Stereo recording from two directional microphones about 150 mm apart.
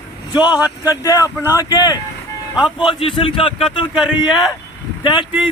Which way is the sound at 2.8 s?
35° left (ahead or behind).